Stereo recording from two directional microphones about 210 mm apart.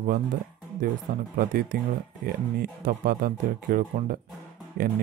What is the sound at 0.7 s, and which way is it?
Speech, 40° right (ahead or behind).